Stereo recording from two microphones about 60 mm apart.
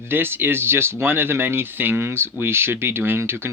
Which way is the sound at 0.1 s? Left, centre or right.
Right.